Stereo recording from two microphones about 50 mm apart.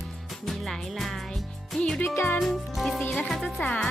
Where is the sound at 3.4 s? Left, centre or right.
Left.